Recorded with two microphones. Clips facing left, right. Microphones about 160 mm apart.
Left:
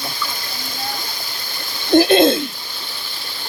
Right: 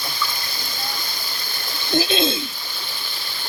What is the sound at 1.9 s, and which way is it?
Speech, 60° left (ahead or behind).